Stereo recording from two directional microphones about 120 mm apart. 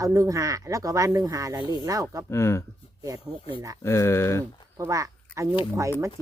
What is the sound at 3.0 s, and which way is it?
Speech, 30° right (ahead or behind).